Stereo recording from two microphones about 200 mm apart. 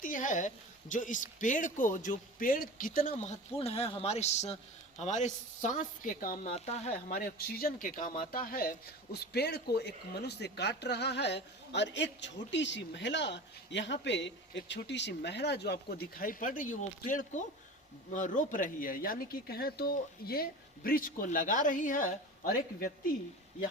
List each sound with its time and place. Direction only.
0.0 s a woman's voice: 40° left (ahead or behind)
6.5 s a woman's voice: 30° left (ahead or behind)
7.1 s speech: 45° left (ahead or behind)